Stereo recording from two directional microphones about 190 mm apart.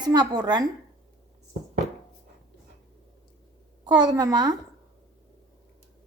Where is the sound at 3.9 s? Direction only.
20° right (ahead or behind).